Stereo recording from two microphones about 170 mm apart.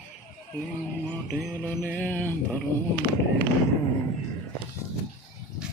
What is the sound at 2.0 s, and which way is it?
Speech, 10° left (ahead or behind).